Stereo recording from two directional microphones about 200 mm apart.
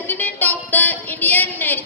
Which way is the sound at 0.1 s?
10° left (ahead or behind).